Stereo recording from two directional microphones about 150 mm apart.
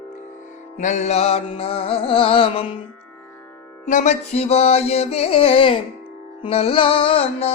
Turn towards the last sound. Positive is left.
turn(degrees=40)  # may be behind; listen again after turning